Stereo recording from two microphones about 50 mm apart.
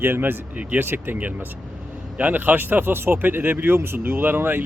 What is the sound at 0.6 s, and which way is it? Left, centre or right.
Speech, right.